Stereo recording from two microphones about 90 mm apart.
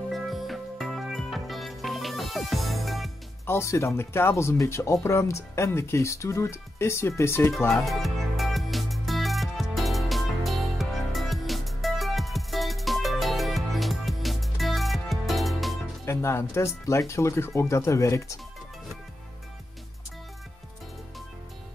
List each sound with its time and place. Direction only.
0.1 s music: centre (ahead or behind)
3.4 s speech: 30° left (ahead or behind)
7.8 s music: centre (ahead or behind)
16.1 s speech: 30° left (ahead or behind)